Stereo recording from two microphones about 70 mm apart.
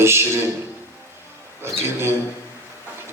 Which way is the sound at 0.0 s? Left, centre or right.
Right.